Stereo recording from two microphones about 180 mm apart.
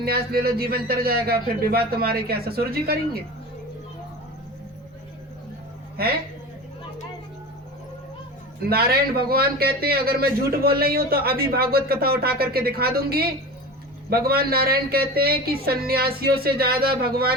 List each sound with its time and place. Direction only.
0.0 s a man's voice: 60° right (ahead or behind)
6.0 s a man's voice: 60° right (ahead or behind)
8.7 s a man's voice: 60° right (ahead or behind)